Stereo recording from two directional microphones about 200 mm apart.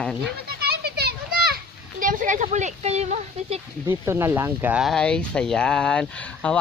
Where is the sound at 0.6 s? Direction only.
50° right (ahead or behind); by 3.6 s 35° right (ahead or behind).